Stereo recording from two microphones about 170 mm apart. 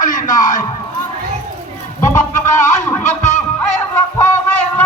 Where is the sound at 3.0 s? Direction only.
45° left (ahead or behind).